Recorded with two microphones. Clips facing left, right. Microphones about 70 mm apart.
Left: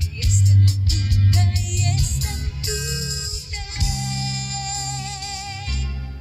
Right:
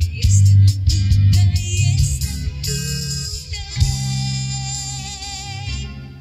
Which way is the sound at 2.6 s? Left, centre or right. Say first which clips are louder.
Even; left.